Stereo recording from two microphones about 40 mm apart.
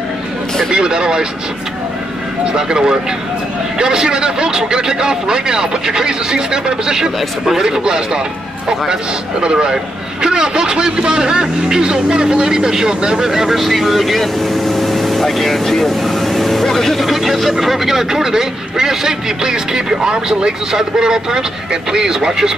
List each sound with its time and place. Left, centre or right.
0.7 s speech: centre
2.5 s a man's voice: centre
9.4 s a man's voice: right